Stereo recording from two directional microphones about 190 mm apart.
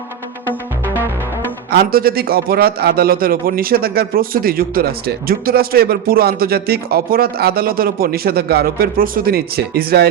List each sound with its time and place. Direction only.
1.7 s a man's voice: 55° right (ahead or behind)